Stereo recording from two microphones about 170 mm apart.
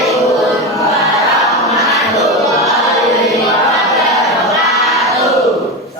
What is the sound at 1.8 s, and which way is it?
Crowd, centre (ahead or behind).